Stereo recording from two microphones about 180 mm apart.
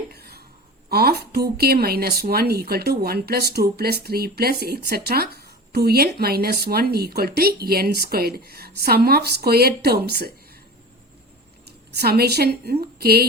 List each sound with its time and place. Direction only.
0.1 s a sound: 60° right (ahead or behind)
0.9 s a woman's voice: 60° right (ahead or behind)
11.6 s a woman's voice: 60° right (ahead or behind)